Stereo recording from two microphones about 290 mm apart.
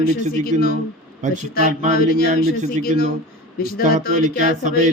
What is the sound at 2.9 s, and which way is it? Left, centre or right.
Speech, right.